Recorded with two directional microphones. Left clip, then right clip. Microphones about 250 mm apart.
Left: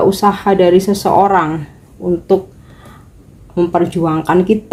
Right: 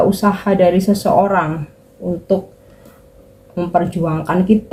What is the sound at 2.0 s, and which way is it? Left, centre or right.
Speech, left.